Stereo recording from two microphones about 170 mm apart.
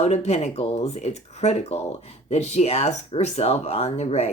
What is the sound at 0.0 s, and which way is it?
Speech, 40° left (ahead or behind).